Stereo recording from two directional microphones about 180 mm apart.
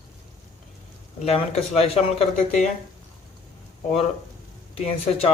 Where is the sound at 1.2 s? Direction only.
35° left (ahead or behind).